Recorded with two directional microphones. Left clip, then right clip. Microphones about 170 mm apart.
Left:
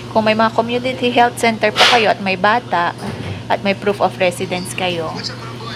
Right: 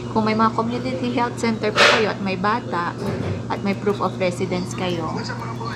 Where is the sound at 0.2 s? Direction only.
25° left (ahead or behind).